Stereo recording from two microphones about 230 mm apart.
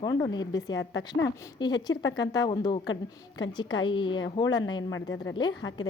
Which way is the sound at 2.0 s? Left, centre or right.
Left.